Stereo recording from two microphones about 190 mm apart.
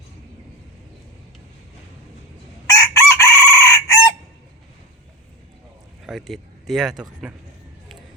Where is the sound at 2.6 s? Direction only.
15° left (ahead or behind).